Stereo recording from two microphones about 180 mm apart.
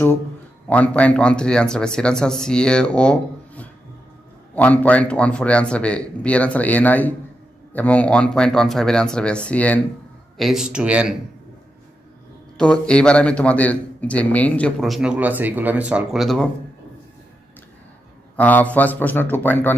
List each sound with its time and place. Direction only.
0.7 s a man's voice: 10° left (ahead or behind)
12.5 s a man's voice: 5° left (ahead or behind)
18.3 s speech: 10° left (ahead or behind)